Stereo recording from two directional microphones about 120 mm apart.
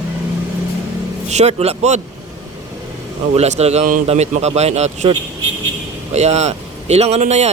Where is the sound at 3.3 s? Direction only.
60° right (ahead or behind).